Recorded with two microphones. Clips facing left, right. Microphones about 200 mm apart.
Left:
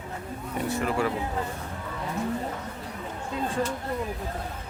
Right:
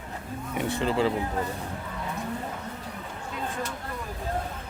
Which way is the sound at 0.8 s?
25° right (ahead or behind).